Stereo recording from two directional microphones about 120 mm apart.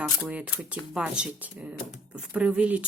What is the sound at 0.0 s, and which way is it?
A woman's voice, 5° right (ahead or behind).